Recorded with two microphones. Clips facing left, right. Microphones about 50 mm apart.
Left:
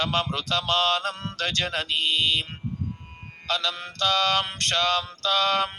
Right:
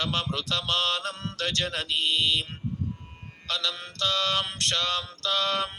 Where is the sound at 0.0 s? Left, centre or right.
Left.